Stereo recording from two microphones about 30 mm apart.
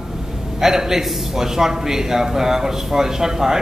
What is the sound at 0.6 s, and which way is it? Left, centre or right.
A man's voice, centre.